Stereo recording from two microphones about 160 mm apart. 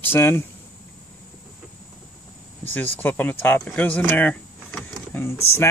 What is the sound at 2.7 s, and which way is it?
Speech, 10° left (ahead or behind).